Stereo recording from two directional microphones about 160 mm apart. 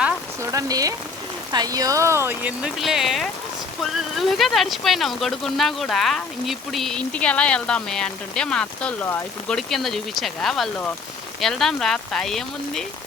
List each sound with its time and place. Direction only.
0.5 s speech: 20° right (ahead or behind); by 9.6 s 10° left (ahead or behind)
9.6 s speech: centre (ahead or behind)